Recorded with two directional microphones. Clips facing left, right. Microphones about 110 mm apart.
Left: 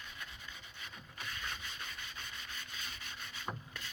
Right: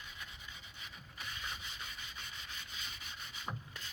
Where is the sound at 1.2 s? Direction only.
15° right (ahead or behind).